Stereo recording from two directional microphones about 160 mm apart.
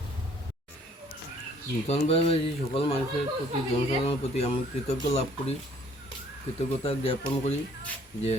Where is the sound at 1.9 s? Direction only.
35° left (ahead or behind).